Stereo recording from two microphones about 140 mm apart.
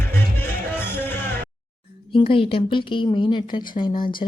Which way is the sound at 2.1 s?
40° left (ahead or behind).